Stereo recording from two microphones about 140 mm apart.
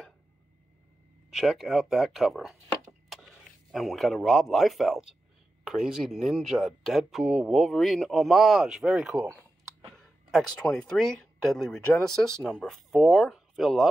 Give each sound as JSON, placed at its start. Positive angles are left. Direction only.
{"t": 1.3, "sound": "speech", "side_deg": 0}